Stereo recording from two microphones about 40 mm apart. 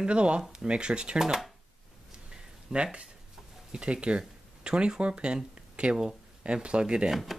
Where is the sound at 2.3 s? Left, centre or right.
Right.